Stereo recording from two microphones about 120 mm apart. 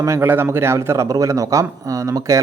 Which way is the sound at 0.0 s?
20° right (ahead or behind).